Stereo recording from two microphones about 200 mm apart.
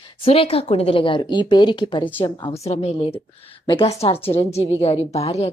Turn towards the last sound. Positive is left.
turn(degrees=30)  # may be behind; listen again after turning